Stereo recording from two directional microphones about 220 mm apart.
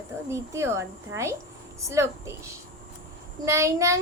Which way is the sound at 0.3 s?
10° right (ahead or behind).